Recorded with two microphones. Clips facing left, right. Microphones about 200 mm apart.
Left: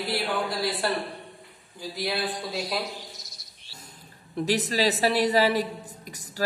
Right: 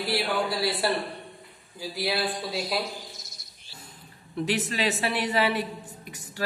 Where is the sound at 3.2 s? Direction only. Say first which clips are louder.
Even; 40° left (ahead or behind).